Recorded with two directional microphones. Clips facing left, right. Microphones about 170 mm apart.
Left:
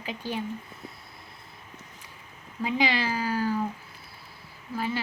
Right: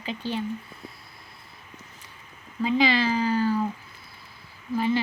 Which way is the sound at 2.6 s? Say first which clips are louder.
Right 4 dB; 10° left (ahead or behind).